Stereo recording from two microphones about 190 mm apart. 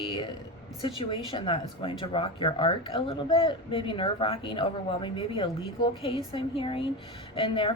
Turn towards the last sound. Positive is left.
turn(degrees=25)  # may be behind; listen again after turning